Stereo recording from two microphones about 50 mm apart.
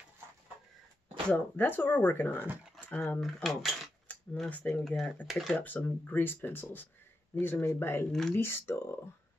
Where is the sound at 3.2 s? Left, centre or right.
Centre.